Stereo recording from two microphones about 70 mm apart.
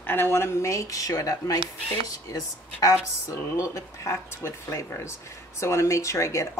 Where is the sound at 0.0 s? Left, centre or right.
Left.